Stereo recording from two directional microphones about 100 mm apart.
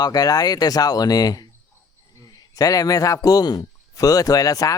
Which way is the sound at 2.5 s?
35° left (ahead or behind).